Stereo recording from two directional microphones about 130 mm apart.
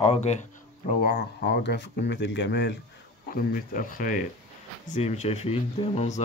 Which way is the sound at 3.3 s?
90° left.